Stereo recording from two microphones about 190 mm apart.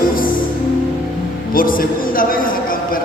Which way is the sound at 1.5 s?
50° left (ahead or behind).